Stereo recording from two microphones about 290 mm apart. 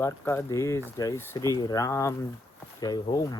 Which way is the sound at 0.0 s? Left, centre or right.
Centre.